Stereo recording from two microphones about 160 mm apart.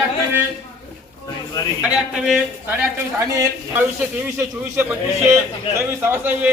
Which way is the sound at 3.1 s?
15° right (ahead or behind).